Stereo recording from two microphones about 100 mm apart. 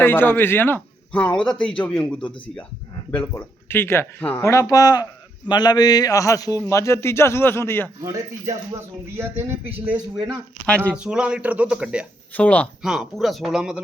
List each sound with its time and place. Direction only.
0.0 s a man's voice: 20° left (ahead or behind)
4.4 s a man's voice: 30° left (ahead or behind)
8.7 s speech: 25° right (ahead or behind)
12.3 s speech: 15° left (ahead or behind)
12.8 s speech: 5° right (ahead or behind)